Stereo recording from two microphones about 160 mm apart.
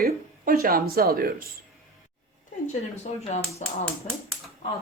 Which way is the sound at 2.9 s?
45° left (ahead or behind).